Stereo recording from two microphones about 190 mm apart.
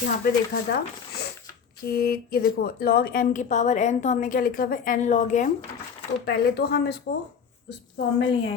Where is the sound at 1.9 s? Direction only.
55° left (ahead or behind).